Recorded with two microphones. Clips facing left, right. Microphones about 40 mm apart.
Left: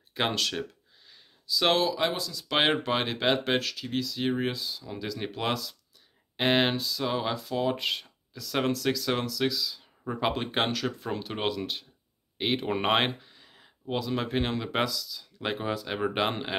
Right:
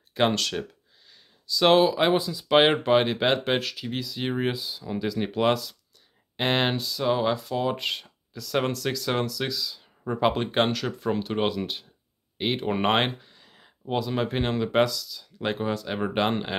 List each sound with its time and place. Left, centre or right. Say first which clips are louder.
0.1 s speech: right 5 dB; centre
1.1 s a sound: even; centre
1.9 s speech: right 6 dB; right
2.5 s speech: right 6 dB; centre